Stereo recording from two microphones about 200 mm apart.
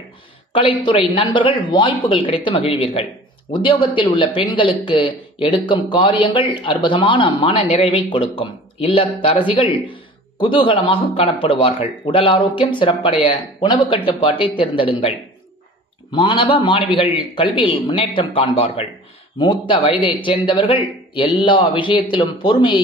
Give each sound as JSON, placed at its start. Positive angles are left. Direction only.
{"t": 0.5, "sound": "speech", "side_deg": 25}